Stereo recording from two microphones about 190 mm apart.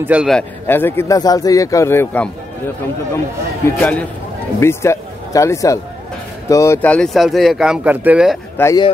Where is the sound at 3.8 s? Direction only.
5° left (ahead or behind).